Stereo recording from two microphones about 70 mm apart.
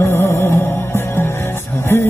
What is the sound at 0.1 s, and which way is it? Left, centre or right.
Music, left.